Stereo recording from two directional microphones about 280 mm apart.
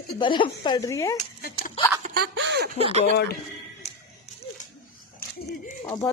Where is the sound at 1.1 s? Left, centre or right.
Left.